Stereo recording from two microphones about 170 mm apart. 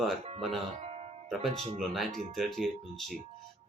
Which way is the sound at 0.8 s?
40° right (ahead or behind).